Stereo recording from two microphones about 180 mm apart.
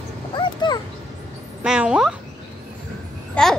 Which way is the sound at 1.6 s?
5° right (ahead or behind).